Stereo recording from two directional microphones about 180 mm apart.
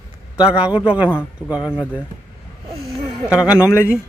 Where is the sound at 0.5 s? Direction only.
5° right (ahead or behind).